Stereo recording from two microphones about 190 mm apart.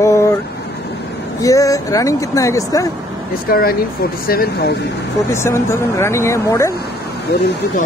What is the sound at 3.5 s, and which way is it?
Speech, 50° left (ahead or behind).